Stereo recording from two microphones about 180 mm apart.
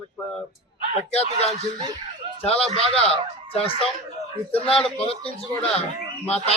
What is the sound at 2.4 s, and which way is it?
Speech, 35° left (ahead or behind).